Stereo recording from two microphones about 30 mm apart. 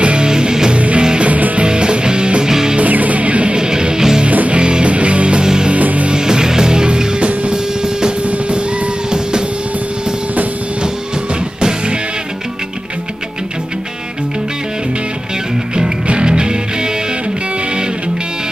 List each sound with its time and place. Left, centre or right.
0.0 s music: right
0.3 s music: right
0.7 s music: right
1.6 s music: right
2.8 s music: right
3.5 s music: right
4.5 s music: right
5.4 s music: right
5.8 s music: right
6.0 s music: right
7.2 s music: right
7.5 s music: right
8.3 s music: right
16.1 s music: right